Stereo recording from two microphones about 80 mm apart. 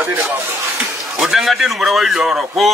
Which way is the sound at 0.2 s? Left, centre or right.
Right.